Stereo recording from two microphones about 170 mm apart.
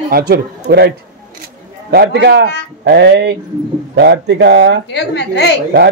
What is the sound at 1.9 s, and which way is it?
Speech, 75° right (ahead or behind).